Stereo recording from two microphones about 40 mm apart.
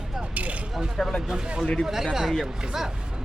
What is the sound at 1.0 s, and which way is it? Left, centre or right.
Speech, centre.